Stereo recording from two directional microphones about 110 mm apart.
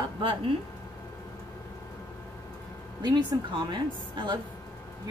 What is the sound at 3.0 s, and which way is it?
A woman's voice, 40° right (ahead or behind).